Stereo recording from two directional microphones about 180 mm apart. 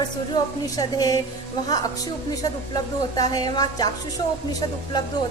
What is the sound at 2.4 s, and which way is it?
A woman's voice, 20° left (ahead or behind).